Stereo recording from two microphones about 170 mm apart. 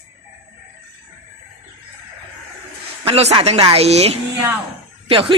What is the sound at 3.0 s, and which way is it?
Speech, 35° right (ahead or behind).